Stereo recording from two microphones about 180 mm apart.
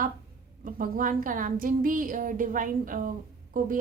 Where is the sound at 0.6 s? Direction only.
50° right (ahead or behind).